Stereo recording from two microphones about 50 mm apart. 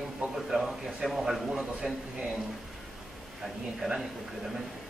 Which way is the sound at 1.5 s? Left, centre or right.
Centre.